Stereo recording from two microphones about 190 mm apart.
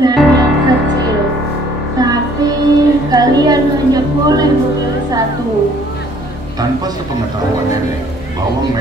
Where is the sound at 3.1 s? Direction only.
20° right (ahead or behind).